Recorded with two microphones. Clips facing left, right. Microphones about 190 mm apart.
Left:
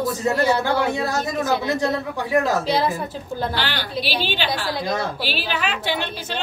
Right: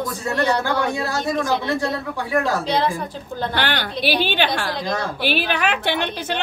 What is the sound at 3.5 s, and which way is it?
A woman's voice, 55° right (ahead or behind).